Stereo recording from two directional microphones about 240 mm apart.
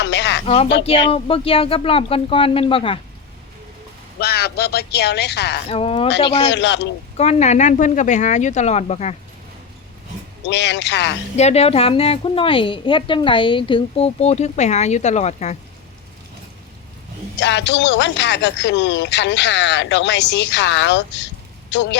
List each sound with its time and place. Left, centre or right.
0.0 s a sound: left
0.4 s a woman's voice: left
4.2 s speech: left
5.6 s a woman's voice: left
6.5 s speech: left
7.2 s a woman's voice: left
10.4 s speech: left
11.3 s a woman's voice: left
17.4 s speech: left